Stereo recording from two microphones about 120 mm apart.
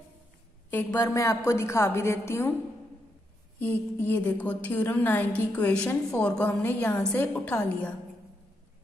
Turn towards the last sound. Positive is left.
turn(degrees=15)  # may be behind; listen again after turning